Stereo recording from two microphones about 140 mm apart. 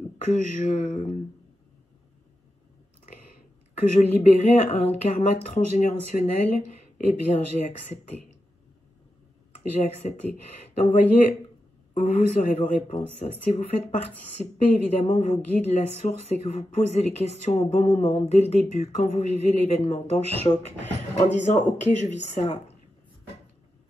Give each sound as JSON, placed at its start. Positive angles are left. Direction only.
{"t": 0.2, "sound": "speech", "side_deg": 60}
{"t": 3.7, "sound": "speech", "side_deg": 55}
{"t": 5.5, "sound": "speech", "side_deg": 65}
{"t": 6.1, "sound": "speech", "side_deg": 50}
{"t": 9.6, "sound": "speech", "side_deg": 55}
{"t": 21.3, "sound": "speech", "side_deg": 55}